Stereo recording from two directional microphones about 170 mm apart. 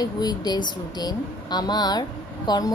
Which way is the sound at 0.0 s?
25° left (ahead or behind).